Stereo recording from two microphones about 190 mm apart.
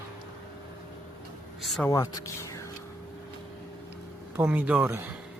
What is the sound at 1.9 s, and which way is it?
Speech, 15° left (ahead or behind).